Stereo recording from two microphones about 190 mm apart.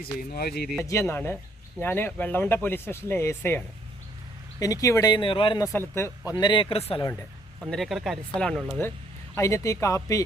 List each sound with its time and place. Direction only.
0.0 s speech: 55° left (ahead or behind)
0.9 s speech: 15° left (ahead or behind)
4.6 s speech: 20° left (ahead or behind)
5.9 s speech: 15° left (ahead or behind)
6.4 s speech: 25° left (ahead or behind)
7.7 s speech: centre (ahead or behind)
9.3 s speech: 15° left (ahead or behind)